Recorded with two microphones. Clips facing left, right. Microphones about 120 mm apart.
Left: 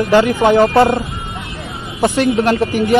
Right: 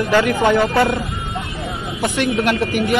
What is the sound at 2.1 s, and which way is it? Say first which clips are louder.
Speech: left 3 dB; 30° left (ahead or behind).